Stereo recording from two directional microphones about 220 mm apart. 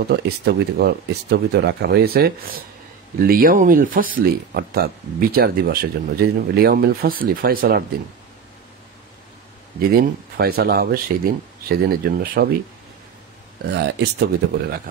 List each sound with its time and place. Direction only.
0.1 s speech: 45° right (ahead or behind)
9.8 s speech: 45° right (ahead or behind)
13.7 s speech: 50° right (ahead or behind)